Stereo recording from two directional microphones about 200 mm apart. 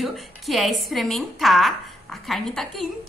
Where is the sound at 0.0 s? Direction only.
Centre (ahead or behind).